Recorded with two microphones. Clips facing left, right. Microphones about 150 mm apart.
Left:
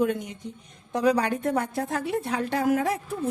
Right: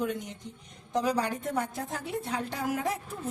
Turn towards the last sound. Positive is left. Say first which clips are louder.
# left 7 dB
turn(degrees=65)  # may be behind; listen again after turning